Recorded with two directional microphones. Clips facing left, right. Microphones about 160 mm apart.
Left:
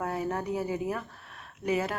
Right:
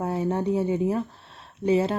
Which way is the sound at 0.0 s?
25° right (ahead or behind).